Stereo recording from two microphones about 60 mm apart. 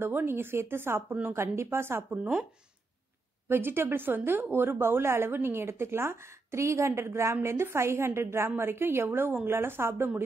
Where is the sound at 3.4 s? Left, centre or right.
Right.